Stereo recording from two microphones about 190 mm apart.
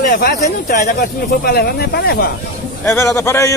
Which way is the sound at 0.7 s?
50° left (ahead or behind).